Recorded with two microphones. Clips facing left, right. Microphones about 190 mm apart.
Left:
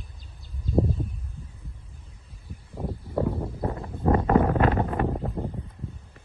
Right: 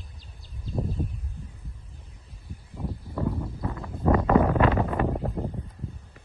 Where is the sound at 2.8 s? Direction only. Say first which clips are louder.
Left 3 dB; 35° left (ahead or behind).